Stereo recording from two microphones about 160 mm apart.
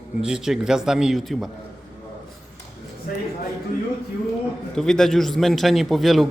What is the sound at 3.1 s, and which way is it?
Speech, 65° left (ahead or behind).